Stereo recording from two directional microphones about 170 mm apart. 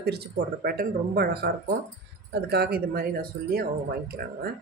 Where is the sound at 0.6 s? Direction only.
65° right (ahead or behind).